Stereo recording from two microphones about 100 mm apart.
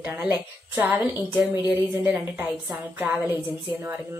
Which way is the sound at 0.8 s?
15° right (ahead or behind).